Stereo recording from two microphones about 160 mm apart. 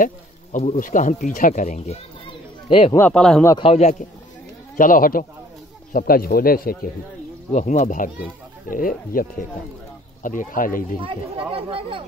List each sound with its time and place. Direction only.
0.0 s speech: 50° left (ahead or behind)
2.7 s speech: 35° left (ahead or behind)
3.0 s speech: 5° left (ahead or behind)
3.4 s a man's voice: 30° left (ahead or behind)
4.7 s speech: 60° left (ahead or behind)
7.5 s speech: 50° left (ahead or behind)
11.0 s speech: 35° right (ahead or behind)